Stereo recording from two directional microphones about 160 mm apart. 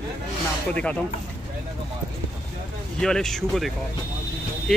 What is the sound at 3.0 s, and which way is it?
Speech, 5° left (ahead or behind).